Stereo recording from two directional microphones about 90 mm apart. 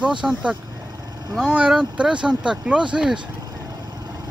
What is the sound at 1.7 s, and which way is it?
Speech, 10° right (ahead or behind).